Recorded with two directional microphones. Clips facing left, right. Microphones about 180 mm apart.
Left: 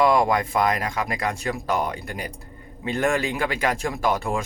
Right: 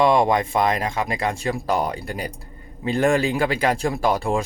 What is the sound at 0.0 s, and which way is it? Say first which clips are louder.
Speech: right 2 dB; 25° right (ahead or behind).